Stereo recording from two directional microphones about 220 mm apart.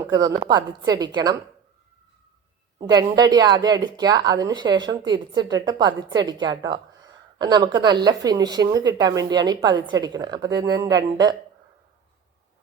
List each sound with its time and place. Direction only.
0.0 s a woman's voice: 15° right (ahead or behind)
2.8 s a woman's voice: 15° right (ahead or behind)